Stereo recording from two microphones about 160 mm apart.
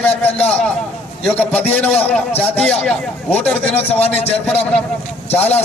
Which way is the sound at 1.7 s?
10° left (ahead or behind).